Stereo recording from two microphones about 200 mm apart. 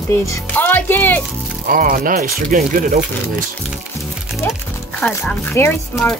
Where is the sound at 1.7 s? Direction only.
45° right (ahead or behind).